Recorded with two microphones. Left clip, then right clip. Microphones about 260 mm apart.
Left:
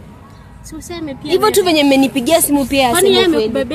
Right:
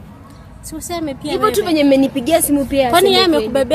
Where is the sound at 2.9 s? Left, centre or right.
Right.